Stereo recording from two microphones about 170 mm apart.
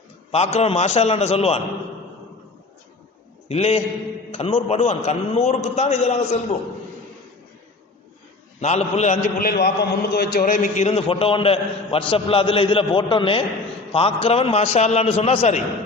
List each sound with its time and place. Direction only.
0.3 s a man's voice: 40° left (ahead or behind)
3.5 s a man's voice: 35° left (ahead or behind)
8.6 s a man's voice: 40° left (ahead or behind)
9.5 s a man's voice: 65° left (ahead or behind); by 15.6 s 40° left (ahead or behind)